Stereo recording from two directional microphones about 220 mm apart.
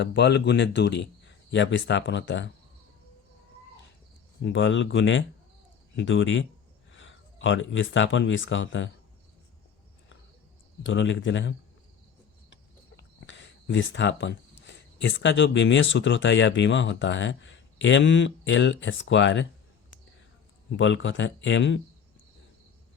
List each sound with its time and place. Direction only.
0.0 s speech: 50° left (ahead or behind)
4.4 s speech: 55° left (ahead or behind)
10.8 s speech: 60° left (ahead or behind)
13.0 s speech: 55° left (ahead or behind)
20.7 s speech: 55° left (ahead or behind)